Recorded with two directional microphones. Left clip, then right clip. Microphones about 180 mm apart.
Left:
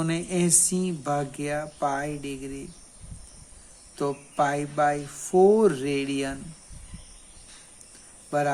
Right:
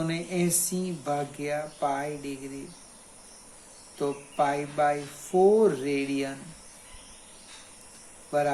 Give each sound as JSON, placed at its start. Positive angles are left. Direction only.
{"t": 0.0, "sound": "speech", "side_deg": 45}
{"t": 3.9, "sound": "speech", "side_deg": 50}
{"t": 8.3, "sound": "speech", "side_deg": 45}